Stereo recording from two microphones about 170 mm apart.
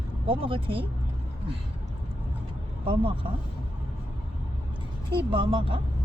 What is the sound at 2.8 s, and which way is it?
Speech, 30° right (ahead or behind).